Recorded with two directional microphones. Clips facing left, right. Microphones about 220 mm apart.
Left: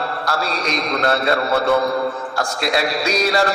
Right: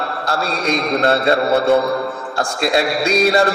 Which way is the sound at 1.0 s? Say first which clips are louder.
Right 2 dB; 25° right (ahead or behind).